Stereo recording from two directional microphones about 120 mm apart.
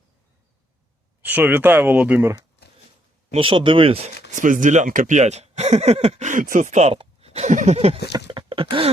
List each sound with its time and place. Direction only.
1.2 s speech: 15° right (ahead or behind)
3.3 s speech: 50° right (ahead or behind)
4.4 s speech: 90° right; by 7.9 s 65° right (ahead or behind)
8.1 s a sound: 45° right (ahead or behind)